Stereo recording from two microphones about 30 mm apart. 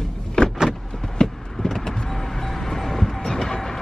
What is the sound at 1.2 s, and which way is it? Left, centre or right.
Vehicle, left.